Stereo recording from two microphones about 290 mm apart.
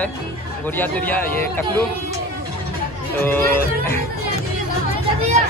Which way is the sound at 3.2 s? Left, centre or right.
Centre.